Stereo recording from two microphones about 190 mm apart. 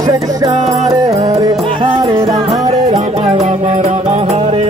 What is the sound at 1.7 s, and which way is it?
Music, 30° right (ahead or behind).